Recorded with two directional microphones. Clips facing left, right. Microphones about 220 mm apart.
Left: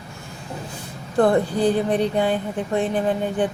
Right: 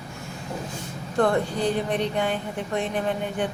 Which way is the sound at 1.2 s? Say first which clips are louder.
Left 5 dB; 35° left (ahead or behind).